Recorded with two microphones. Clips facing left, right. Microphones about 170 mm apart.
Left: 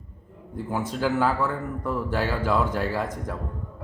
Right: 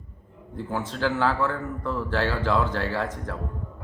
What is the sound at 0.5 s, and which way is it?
A man's voice, 10° left (ahead or behind).